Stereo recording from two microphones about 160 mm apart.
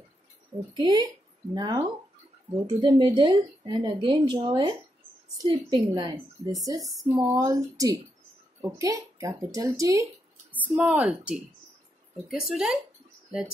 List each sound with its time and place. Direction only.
0.7 s speech: 25° right (ahead or behind)
10.5 s speech: 10° right (ahead or behind)